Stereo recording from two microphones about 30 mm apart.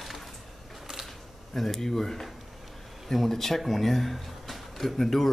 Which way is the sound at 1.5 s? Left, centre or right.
Centre.